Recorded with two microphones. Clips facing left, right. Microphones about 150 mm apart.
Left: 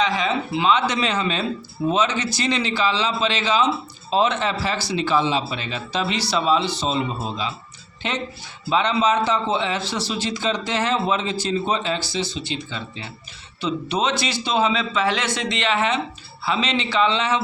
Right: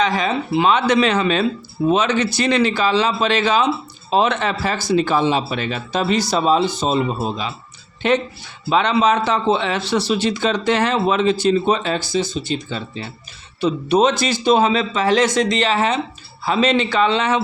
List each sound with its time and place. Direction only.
0.0 s a man's voice: 50° right (ahead or behind)